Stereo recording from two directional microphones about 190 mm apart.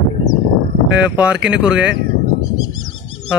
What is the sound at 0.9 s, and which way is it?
A man's voice, 5° right (ahead or behind).